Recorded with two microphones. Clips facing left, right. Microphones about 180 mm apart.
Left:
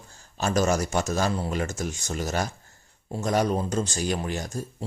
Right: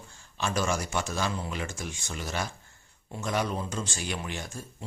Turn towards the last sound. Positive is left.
turn(degrees=40)  # may be behind; listen again after turning